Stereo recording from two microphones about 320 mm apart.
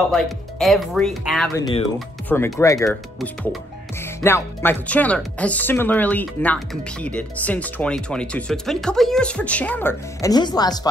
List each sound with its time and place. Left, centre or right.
0.1 s speech: centre
1.6 s speech: centre